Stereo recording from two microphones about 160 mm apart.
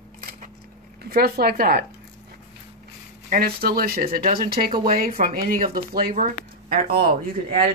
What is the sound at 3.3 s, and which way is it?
Speech, 75° right (ahead or behind).